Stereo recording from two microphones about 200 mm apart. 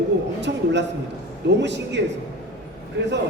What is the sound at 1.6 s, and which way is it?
Speech, 60° right (ahead or behind).